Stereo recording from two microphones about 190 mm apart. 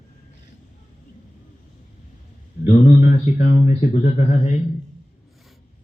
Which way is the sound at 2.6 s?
35° left (ahead or behind).